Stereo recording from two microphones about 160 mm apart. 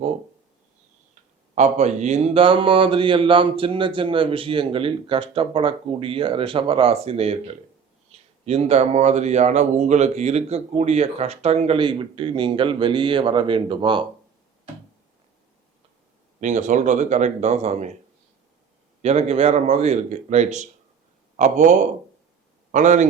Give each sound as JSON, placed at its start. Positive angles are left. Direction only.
{"t": 1.5, "sound": "speech", "side_deg": -45}
{"t": 11.8, "sound": "speech", "side_deg": -30}
{"t": 16.4, "sound": "speech", "side_deg": -50}
{"t": 19.0, "sound": "speech", "side_deg": -45}